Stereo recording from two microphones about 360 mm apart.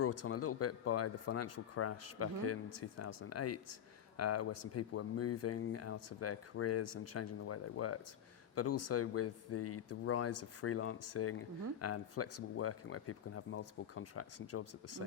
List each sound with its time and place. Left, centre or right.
0.0 s speech: left